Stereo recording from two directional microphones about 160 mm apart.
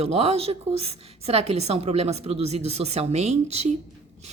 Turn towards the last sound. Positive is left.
turn(degrees=-45)  # may be behind; listen again after turning